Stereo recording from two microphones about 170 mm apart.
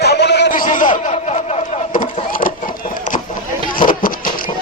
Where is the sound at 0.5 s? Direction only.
50° left (ahead or behind).